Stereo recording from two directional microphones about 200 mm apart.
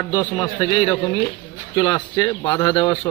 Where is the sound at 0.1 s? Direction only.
20° left (ahead or behind).